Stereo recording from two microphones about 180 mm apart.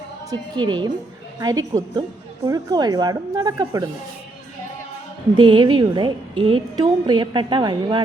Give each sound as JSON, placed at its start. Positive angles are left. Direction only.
{"t": 0.3, "sound": "a woman's voice", "side_deg": -25}
{"t": 5.3, "sound": "a woman's voice", "side_deg": -25}